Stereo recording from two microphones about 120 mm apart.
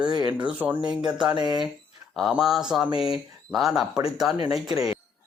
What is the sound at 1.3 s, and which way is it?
Speech, 35° right (ahead or behind).